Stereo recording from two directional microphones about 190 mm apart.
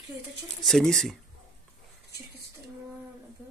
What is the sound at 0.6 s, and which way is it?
Speech, centre (ahead or behind).